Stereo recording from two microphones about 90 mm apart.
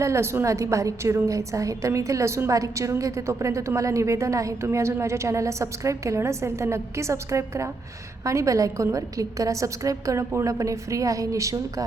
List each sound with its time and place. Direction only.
0.0 s a woman's voice: 30° right (ahead or behind)